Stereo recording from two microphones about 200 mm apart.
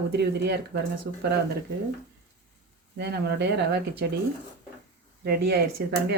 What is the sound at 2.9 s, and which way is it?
Speech, 55° right (ahead or behind).